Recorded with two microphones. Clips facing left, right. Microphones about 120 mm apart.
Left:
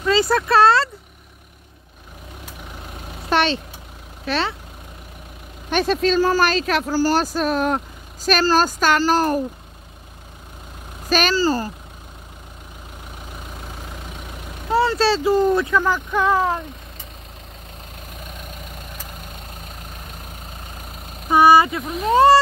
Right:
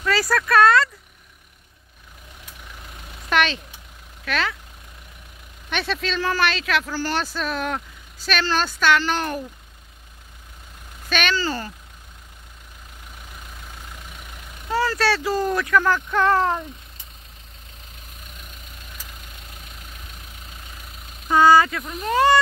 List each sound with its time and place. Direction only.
0.0 s speech: 25° left (ahead or behind)
3.3 s speech: 35° left (ahead or behind)
5.7 s speech: 40° left (ahead or behind)
11.1 s speech: 35° left (ahead or behind)
14.7 s speech: 25° left (ahead or behind)
15.8 s speech: 10° left (ahead or behind)
21.3 s speech: 25° left (ahead or behind)